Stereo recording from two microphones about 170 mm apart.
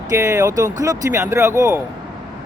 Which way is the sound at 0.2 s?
15° right (ahead or behind).